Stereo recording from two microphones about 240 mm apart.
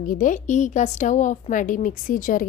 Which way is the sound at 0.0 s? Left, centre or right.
Left.